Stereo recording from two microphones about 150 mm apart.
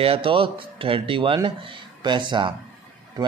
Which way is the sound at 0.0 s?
35° right (ahead or behind).